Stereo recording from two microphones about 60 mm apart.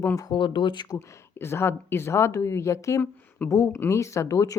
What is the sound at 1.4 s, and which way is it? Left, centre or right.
A woman's voice, left.